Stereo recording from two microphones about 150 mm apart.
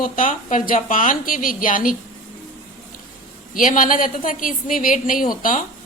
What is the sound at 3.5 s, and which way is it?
A woman's voice, 60° left (ahead or behind).